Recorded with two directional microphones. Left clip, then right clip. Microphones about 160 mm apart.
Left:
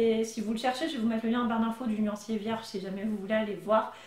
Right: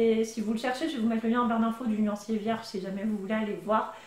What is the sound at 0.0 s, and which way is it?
Speech, centre (ahead or behind).